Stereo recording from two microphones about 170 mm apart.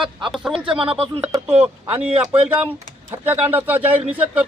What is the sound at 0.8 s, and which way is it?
Speech, 35° right (ahead or behind).